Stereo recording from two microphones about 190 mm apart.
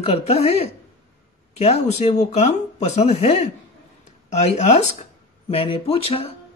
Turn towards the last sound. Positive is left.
turn(degrees=30)  # may be behind; listen again after turning